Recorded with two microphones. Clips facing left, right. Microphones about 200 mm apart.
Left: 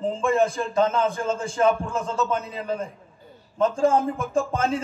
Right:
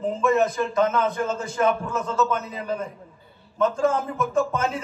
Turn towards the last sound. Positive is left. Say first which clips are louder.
# even
turn(degrees=30)  # may be behind; listen again after turning